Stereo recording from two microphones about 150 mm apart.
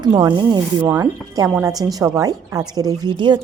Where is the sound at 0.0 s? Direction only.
30° right (ahead or behind).